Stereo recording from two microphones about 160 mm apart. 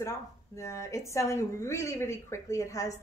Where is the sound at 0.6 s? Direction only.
20° left (ahead or behind).